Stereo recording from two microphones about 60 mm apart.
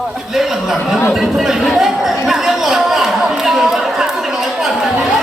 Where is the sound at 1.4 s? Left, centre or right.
Centre.